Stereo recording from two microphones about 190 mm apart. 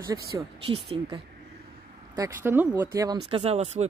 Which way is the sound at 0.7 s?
30° right (ahead or behind).